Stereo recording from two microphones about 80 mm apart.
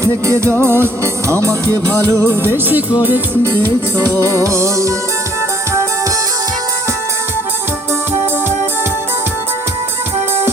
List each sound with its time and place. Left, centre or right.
0.0 s music: right
4.4 s music: right